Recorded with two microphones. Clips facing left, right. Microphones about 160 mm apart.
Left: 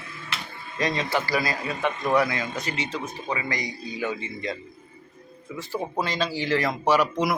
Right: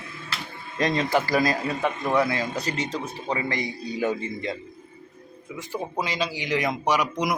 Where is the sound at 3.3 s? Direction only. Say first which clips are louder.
Right 3 dB; 25° right (ahead or behind).